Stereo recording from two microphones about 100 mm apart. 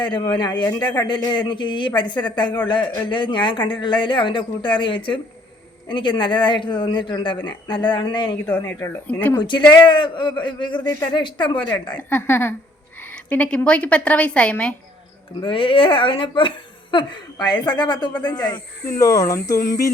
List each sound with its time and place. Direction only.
0.0 s speech: 55° left (ahead or behind)
9.4 s speech: 50° left (ahead or behind)
11.9 s a woman's voice: 20° left (ahead or behind)
15.4 s speech: 60° left (ahead or behind)
18.9 s speech: 30° left (ahead or behind)